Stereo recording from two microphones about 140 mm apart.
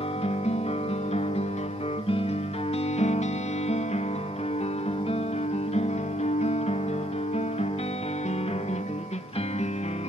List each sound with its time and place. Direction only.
3.0 s music: 50° left (ahead or behind)
5.8 s music: 50° left (ahead or behind)